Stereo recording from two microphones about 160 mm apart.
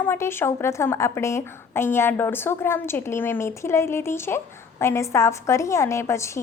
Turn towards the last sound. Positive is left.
turn(degrees=15)  # may be behind; listen again after turning